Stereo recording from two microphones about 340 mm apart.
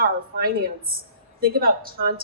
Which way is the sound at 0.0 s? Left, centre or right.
Right.